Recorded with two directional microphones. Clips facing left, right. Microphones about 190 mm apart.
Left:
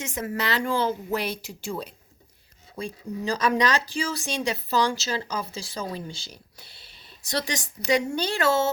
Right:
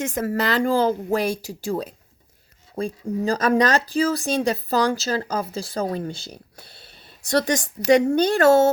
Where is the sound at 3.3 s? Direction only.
45° right (ahead or behind).